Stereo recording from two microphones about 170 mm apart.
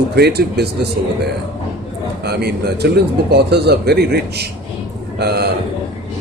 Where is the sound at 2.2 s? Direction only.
70° right (ahead or behind).